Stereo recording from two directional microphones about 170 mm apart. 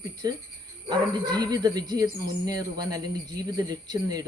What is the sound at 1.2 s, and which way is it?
Speech, 25° right (ahead or behind).